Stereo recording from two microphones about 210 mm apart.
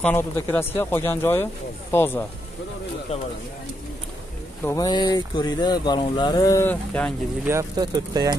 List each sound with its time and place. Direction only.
0.0 s speech: 10° left (ahead or behind)
4.6 s speech: 20° left (ahead or behind)
7.4 s speech: 15° right (ahead or behind)